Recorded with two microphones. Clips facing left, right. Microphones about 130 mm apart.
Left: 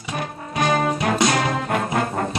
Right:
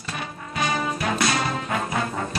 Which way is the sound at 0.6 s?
55° left (ahead or behind).